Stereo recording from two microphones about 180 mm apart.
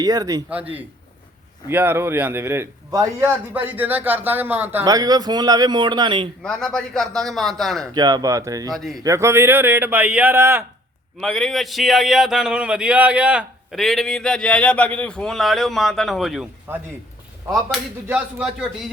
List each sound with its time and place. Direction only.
0.0 s speech: 20° right (ahead or behind)
0.5 s a man's voice: 10° right (ahead or behind); by 6.2 s 25° right (ahead or behind)
6.4 s a man's voice: 5° left (ahead or behind)
7.9 s speech: 20° right (ahead or behind)
8.7 s a man's voice: centre (ahead or behind)
9.0 s a man's voice: 15° right (ahead or behind)
11.2 s a man's voice: 5° left (ahead or behind)
16.7 s a man's voice: 10° right (ahead or behind)